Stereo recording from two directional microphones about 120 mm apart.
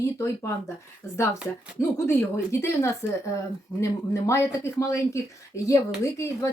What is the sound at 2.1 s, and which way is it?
Speech, 20° left (ahead or behind).